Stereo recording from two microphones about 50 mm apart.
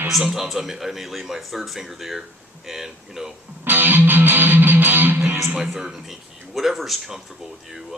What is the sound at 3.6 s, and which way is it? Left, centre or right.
Music, right.